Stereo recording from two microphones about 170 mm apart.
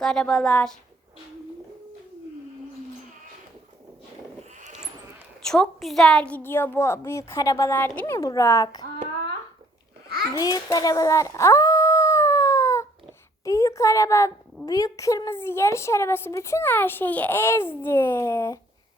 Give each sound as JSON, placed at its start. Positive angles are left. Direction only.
{"t": 0.0, "sound": "a woman's voice", "side_deg": 5}
{"t": 5.4, "sound": "a woman's voice", "side_deg": 5}
{"t": 10.3, "sound": "a sound", "side_deg": 20}
{"t": 13.4, "sound": "a woman's voice", "side_deg": 20}